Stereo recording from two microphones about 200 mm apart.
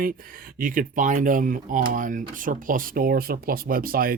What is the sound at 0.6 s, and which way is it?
Speech, 40° right (ahead or behind).